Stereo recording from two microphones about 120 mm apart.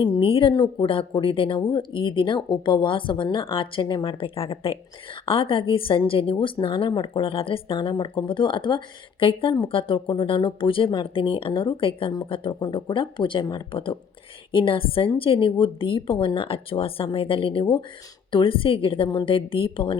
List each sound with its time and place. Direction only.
0.0 s a woman's voice: 40° left (ahead or behind)